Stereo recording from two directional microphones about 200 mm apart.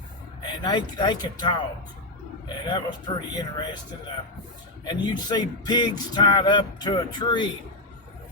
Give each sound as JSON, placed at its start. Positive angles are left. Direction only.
{"t": 0.4, "sound": "speech", "side_deg": 20}
{"t": 2.6, "sound": "speech", "side_deg": 20}
{"t": 4.9, "sound": "speech", "side_deg": 20}